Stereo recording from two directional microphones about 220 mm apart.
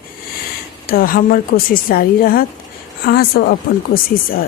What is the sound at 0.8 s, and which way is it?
A woman's voice, 40° left (ahead or behind).